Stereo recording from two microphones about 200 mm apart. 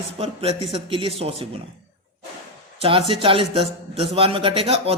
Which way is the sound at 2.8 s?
25° right (ahead or behind).